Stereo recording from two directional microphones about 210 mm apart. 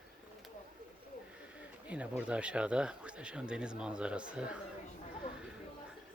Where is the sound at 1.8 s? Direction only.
5° right (ahead or behind).